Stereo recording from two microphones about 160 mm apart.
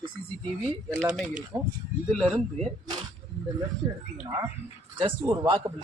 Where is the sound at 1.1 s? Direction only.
Centre (ahead or behind).